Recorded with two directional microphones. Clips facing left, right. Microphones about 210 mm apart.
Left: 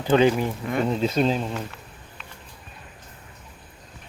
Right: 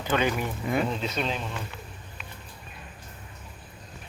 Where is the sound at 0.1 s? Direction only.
30° left (ahead or behind).